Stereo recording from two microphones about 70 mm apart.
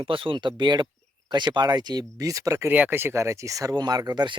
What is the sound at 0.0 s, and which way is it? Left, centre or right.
Speech, right.